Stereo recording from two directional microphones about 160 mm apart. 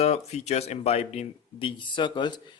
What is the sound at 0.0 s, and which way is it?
Speech, 40° left (ahead or behind).